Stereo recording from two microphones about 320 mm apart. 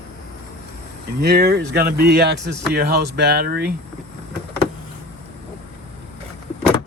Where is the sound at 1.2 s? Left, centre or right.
Right.